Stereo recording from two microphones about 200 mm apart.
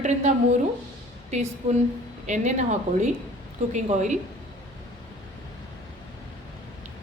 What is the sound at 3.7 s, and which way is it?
Speech, 35° right (ahead or behind).